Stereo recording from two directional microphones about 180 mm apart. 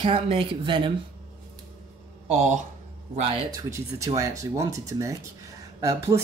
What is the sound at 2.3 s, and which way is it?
Speech, 45° right (ahead or behind).